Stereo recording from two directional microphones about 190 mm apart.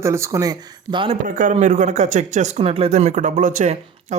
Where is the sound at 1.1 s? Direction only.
40° right (ahead or behind).